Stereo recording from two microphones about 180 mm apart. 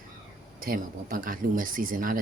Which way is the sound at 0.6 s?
50° right (ahead or behind).